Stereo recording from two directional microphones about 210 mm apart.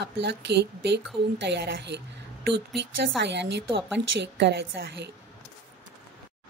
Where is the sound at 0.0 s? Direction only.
55° right (ahead or behind).